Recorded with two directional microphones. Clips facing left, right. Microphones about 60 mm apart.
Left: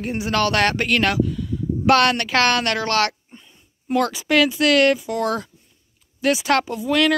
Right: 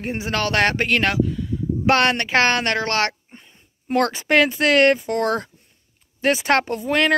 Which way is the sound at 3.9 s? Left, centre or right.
Right.